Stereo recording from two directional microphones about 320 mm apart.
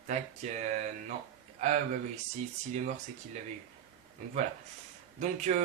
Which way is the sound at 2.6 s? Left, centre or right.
Right.